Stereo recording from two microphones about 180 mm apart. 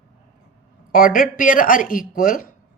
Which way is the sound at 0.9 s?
50° left (ahead or behind).